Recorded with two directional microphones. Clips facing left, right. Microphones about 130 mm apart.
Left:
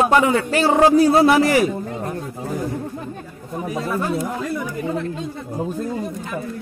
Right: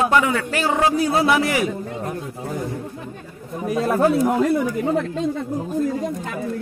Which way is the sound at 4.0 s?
70° right (ahead or behind).